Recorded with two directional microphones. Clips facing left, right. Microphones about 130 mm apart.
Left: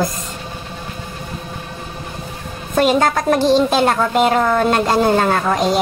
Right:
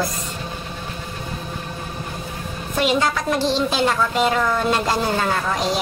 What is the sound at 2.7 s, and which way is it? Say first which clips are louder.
A woman's voice: left 5 dB; 45° left (ahead or behind).